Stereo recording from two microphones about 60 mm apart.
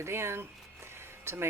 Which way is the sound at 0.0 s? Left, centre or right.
Right.